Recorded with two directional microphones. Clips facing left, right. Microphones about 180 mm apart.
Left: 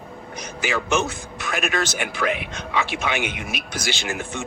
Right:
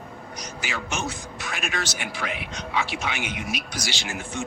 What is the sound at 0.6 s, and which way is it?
Speech, 60° left (ahead or behind).